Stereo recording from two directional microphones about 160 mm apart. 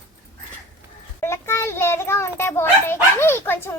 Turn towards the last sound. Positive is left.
turn(degrees=15)  # may be behind; listen again after turning